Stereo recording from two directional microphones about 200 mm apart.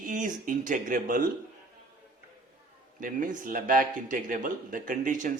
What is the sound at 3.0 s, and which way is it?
Speech, 40° right (ahead or behind).